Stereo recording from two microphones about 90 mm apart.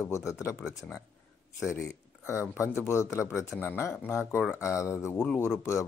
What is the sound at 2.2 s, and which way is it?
Speech, 30° left (ahead or behind).